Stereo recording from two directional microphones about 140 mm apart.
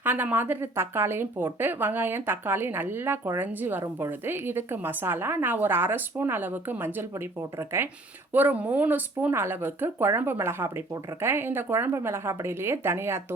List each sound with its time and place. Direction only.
0.0 s speech: 15° right (ahead or behind)